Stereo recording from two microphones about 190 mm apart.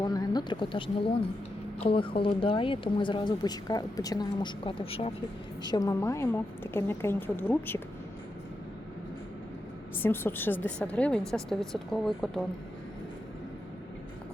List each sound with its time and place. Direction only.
0.0 s speech: 20° left (ahead or behind)
5.6 s a woman's voice: 20° left (ahead or behind)
10.0 s a woman's voice: 10° left (ahead or behind)